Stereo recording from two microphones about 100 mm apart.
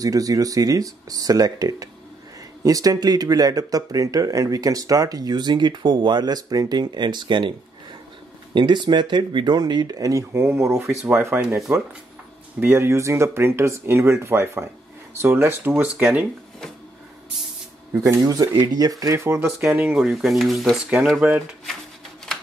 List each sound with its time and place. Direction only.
0.0 s speech: 35° right (ahead or behind); by 7.5 s 55° right (ahead or behind)
8.5 s speech: 50° right (ahead or behind); by 16.3 s 15° right (ahead or behind)
17.9 s speech: 35° right (ahead or behind)
18.8 s speech: 35° right (ahead or behind)
19.6 s speech: 10° right (ahead or behind)